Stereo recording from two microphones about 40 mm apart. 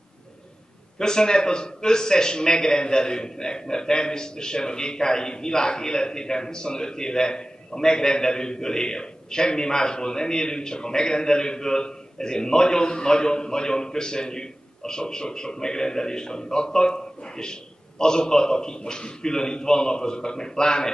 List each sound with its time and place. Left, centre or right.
0.9 s a man's voice: centre